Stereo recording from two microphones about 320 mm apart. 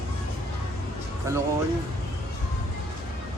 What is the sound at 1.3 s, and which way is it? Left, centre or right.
Speech, centre.